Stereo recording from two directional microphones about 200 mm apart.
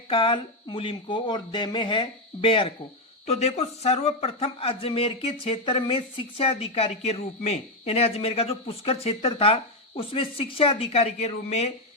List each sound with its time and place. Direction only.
0.1 s a man's voice: 25° left (ahead or behind)